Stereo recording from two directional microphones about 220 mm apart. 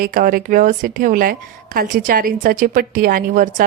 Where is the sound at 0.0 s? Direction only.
40° right (ahead or behind).